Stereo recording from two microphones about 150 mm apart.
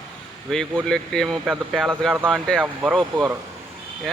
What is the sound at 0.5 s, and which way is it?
Speech, 5° left (ahead or behind).